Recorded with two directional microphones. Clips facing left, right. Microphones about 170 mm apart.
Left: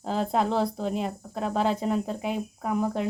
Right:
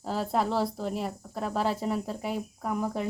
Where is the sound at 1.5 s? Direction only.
5° right (ahead or behind).